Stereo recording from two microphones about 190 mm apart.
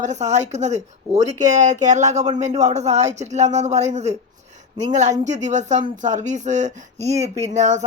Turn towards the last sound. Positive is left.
turn(degrees=-40)  # may be behind; listen again after turning